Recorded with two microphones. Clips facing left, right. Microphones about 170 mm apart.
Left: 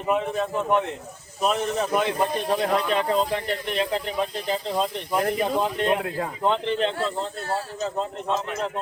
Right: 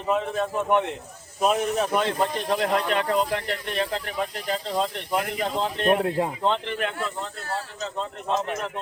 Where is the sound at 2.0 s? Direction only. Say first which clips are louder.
Left 1 dB; 10° left (ahead or behind).